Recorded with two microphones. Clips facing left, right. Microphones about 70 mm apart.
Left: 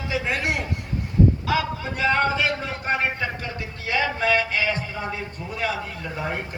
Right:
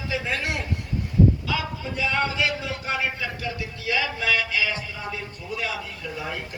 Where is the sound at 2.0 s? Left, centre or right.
Left.